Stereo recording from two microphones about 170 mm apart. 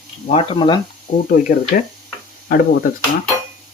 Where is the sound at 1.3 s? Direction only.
50° left (ahead or behind).